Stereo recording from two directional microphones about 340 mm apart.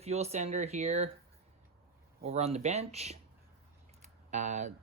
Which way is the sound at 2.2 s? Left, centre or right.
Centre.